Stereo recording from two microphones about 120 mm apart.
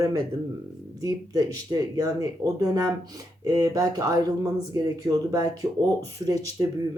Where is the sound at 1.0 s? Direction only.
30° right (ahead or behind).